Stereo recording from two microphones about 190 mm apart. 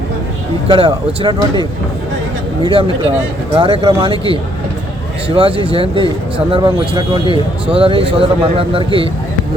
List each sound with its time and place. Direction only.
0.7 s a man's voice: 25° right (ahead or behind)
2.6 s a man's voice: 30° right (ahead or behind)